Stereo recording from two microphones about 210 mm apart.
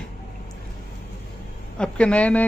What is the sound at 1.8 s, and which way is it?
Speech, 5° left (ahead or behind).